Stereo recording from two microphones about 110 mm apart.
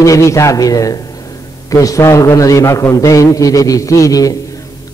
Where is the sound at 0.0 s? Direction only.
30° left (ahead or behind).